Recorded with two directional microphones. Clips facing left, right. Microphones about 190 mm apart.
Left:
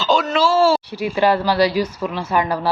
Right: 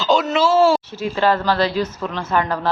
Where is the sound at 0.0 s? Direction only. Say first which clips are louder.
Even; 20° right (ahead or behind).